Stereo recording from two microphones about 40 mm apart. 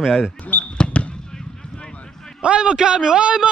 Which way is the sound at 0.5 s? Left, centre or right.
Left.